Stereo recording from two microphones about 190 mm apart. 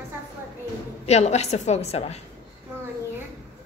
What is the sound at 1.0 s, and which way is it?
A woman's voice, 35° left (ahead or behind).